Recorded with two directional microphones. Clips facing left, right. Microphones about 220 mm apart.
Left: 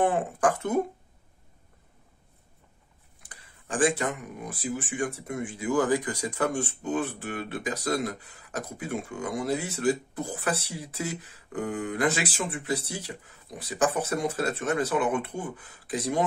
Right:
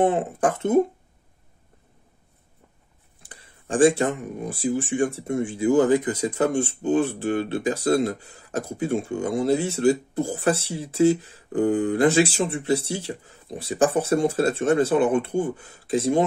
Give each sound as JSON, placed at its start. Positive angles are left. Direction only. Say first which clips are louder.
{"t": 0.0, "sound": "speech", "louder": "right 4 dB", "side_deg": -25}
{"t": 3.2, "sound": "speech", "louder": "right 5 dB", "side_deg": -25}